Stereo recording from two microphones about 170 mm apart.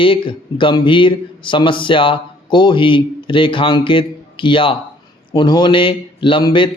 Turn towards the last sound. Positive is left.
turn(degrees=30)  # may be behind; listen again after turning